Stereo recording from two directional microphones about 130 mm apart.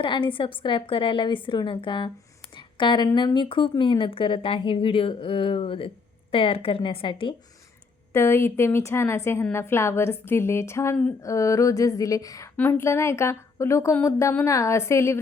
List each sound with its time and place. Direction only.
0.0 s speech: 40° left (ahead or behind)
2.6 s a sound: 35° left (ahead or behind)
3.2 s a woman's voice: 35° left (ahead or behind)
8.1 s a woman's voice: 20° left (ahead or behind)
12.5 s a woman's voice: 15° left (ahead or behind)